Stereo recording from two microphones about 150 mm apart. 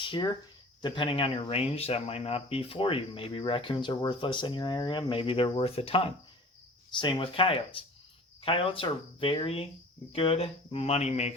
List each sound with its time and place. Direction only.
0.0 s speech: 30° left (ahead or behind); by 11.3 s 45° left (ahead or behind)